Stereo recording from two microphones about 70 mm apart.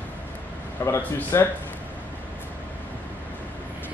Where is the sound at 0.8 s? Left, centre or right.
Left.